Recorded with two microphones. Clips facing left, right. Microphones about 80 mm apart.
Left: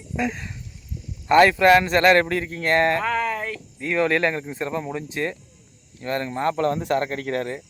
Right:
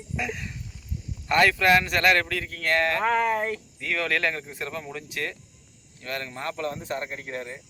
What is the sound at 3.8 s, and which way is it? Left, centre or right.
Speech, left.